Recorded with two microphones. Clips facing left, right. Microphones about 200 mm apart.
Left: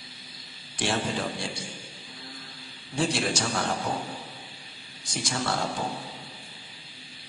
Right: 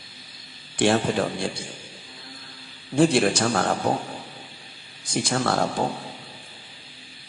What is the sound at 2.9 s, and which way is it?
A man's voice, 55° right (ahead or behind).